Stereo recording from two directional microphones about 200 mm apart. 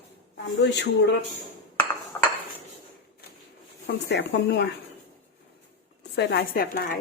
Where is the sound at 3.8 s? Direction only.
55° left (ahead or behind).